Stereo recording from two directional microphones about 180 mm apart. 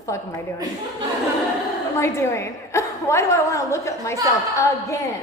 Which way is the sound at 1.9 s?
15° left (ahead or behind).